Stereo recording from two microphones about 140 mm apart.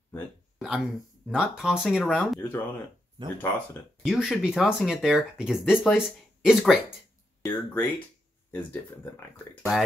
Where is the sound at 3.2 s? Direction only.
35° right (ahead or behind).